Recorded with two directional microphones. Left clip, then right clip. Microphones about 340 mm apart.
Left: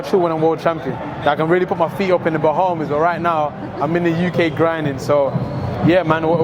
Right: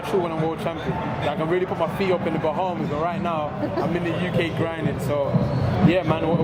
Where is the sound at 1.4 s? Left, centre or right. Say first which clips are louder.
Left 7 dB; left.